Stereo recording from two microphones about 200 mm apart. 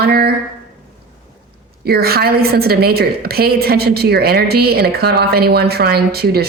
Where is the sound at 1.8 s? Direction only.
50° right (ahead or behind).